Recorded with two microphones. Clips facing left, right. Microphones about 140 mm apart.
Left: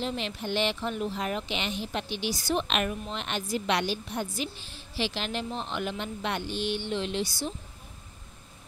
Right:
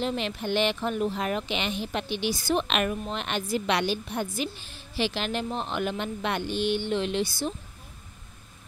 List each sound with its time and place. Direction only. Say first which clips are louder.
0.0 s speech: right 3 dB; 55° right (ahead or behind)